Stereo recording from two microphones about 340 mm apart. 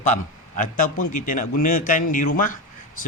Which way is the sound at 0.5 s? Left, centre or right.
Left.